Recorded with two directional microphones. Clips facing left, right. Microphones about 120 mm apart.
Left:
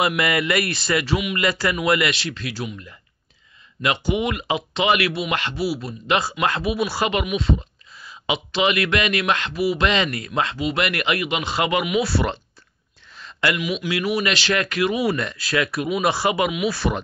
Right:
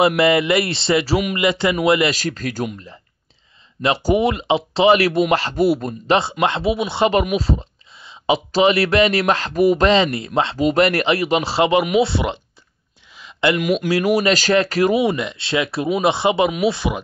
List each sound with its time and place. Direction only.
0.0 s speech: 30° right (ahead or behind)
1.3 s speech: 20° right (ahead or behind)
2.1 s speech: 40° right (ahead or behind)
3.8 s speech: 35° right (ahead or behind)
5.6 s speech: 50° right (ahead or behind)
6.0 s speech: 30° right (ahead or behind)
7.1 s a sound: 35° right (ahead or behind)
8.5 s speech: 35° right (ahead or behind)
9.8 s speech: 30° right (ahead or behind)
12.1 s speech: 15° right (ahead or behind)
13.1 s a sound: 15° right (ahead or behind)
13.6 s speech: 45° right (ahead or behind)
15.0 s speech: 20° right (ahead or behind)